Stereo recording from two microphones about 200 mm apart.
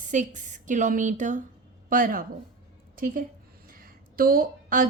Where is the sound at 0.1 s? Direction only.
40° right (ahead or behind).